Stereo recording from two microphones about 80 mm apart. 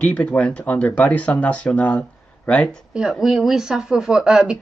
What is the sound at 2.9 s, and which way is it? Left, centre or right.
Speech, centre.